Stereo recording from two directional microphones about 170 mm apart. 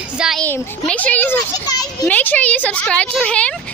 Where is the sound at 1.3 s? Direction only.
20° left (ahead or behind).